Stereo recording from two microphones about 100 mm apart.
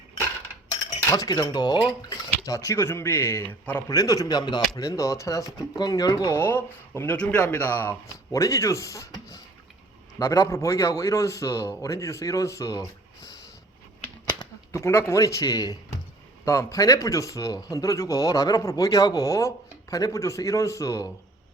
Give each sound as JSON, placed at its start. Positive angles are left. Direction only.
{"t": 1.1, "sound": "speech", "side_deg": 40}
{"t": 3.9, "sound": "speech", "side_deg": 35}
{"t": 4.8, "sound": "speech", "side_deg": 30}
{"t": 6.3, "sound": "speech", "side_deg": 20}
{"t": 10.2, "sound": "speech", "side_deg": 35}
{"t": 14.7, "sound": "a man's voice", "side_deg": 30}